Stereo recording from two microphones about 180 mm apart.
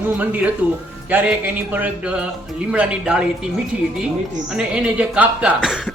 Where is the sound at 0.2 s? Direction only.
10° right (ahead or behind).